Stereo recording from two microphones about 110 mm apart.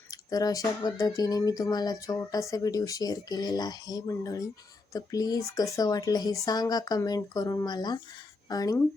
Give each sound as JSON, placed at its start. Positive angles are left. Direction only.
{"t": 0.1, "sound": "speech", "side_deg": 35}